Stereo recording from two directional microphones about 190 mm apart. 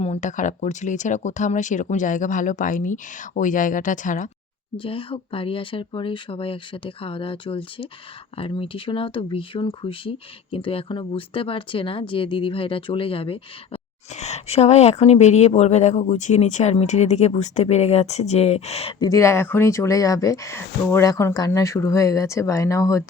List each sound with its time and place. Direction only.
0.0 s speech: 35° left (ahead or behind)
4.8 s speech: 30° left (ahead or behind)
18.9 s speech: 15° left (ahead or behind)